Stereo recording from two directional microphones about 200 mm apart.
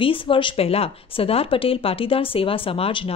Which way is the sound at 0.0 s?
25° left (ahead or behind).